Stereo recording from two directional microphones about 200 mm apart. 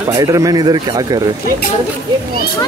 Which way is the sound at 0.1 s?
15° right (ahead or behind).